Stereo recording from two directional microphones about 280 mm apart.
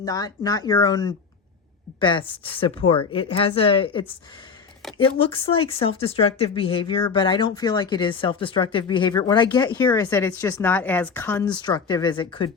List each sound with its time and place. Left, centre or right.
0.0 s speech: centre
5.2 s speech: centre